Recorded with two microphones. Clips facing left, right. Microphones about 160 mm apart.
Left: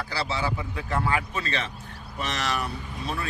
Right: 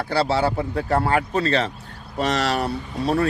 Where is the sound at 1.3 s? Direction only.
35° right (ahead or behind).